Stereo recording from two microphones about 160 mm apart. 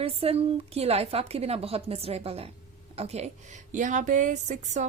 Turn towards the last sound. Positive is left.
turn(degrees=-50)  # may be behind; listen again after turning